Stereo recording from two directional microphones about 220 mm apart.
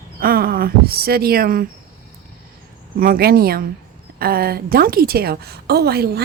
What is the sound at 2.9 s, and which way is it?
A woman's voice, 40° right (ahead or behind).